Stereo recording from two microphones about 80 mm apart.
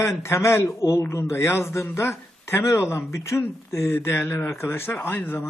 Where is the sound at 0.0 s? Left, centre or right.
Left.